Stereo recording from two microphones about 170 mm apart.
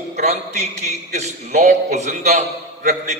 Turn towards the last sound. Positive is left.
turn(degrees=-45)  # may be behind; listen again after turning